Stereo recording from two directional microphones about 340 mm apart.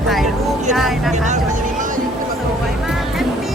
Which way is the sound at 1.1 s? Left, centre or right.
Right.